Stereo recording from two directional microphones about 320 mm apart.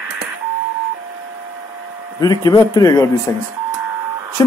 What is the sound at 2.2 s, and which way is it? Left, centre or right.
A man's voice, centre.